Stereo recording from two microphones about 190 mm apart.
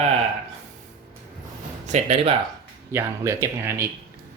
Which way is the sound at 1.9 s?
35° right (ahead or behind).